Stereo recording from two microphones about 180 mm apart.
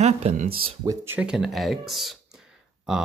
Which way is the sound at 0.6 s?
25° right (ahead or behind).